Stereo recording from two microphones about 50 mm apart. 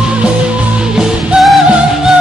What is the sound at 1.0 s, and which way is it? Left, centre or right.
Music, centre.